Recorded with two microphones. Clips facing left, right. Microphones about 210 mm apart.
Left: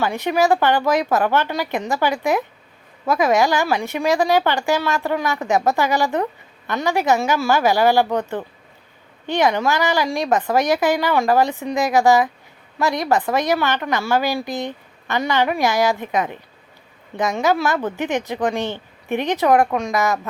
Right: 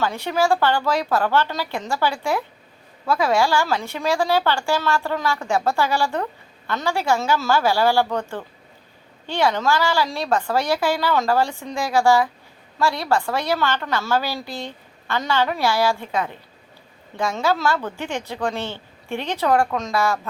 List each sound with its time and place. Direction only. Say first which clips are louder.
0.0 s a woman's voice: left 3 dB; 15° left (ahead or behind)